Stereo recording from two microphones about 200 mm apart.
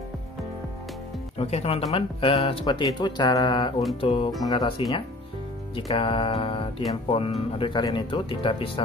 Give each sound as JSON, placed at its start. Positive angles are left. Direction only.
{"t": 1.4, "sound": "speech", "side_deg": 30}